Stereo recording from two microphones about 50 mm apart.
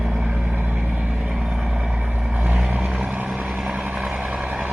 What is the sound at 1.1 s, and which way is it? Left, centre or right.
Vehicle, centre.